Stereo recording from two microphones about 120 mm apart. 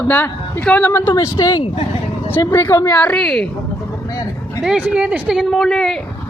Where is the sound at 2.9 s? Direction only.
10° left (ahead or behind).